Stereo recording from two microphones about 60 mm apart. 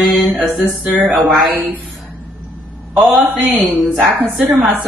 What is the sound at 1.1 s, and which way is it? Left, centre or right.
Speech, centre.